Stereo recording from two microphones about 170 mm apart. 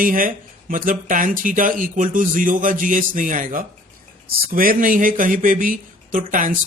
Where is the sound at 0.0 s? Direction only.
55° right (ahead or behind).